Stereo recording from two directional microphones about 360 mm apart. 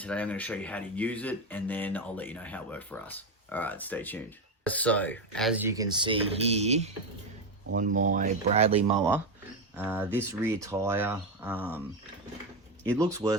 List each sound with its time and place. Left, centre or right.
0.0 s speech: centre
13.0 s speech: centre